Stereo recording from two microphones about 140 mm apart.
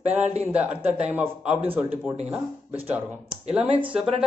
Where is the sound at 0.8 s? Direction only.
50° right (ahead or behind).